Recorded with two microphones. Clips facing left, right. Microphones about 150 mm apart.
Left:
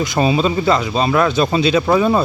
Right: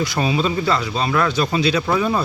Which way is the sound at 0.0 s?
25° left (ahead or behind).